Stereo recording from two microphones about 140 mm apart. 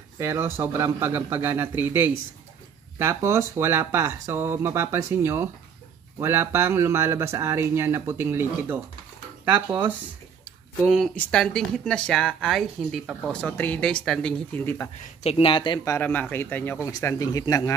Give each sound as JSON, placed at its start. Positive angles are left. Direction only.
{"t": 0.2, "sound": "speech", "side_deg": -20}
{"t": 11.2, "sound": "speech", "side_deg": 5}
{"t": 14.5, "sound": "speech", "side_deg": 15}
{"t": 15.2, "sound": "speech", "side_deg": 40}
{"t": 16.0, "sound": "speech", "side_deg": 10}